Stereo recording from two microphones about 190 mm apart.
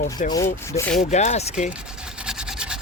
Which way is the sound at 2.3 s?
5° right (ahead or behind).